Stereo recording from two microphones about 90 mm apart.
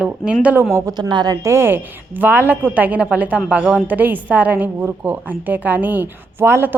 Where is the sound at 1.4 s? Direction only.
25° right (ahead or behind).